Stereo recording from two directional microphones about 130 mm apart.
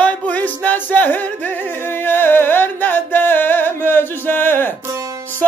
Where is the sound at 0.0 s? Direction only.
10° left (ahead or behind).